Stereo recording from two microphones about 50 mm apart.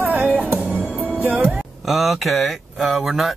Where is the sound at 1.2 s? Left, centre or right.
Right.